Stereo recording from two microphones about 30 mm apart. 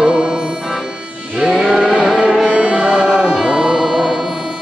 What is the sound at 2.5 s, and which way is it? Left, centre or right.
Music, right.